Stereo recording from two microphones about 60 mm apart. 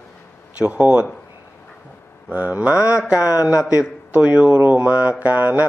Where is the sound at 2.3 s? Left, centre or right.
Right.